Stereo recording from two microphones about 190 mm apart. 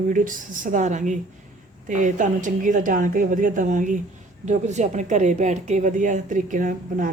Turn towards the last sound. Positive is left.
turn(degrees=-45)  # may be behind; listen again after turning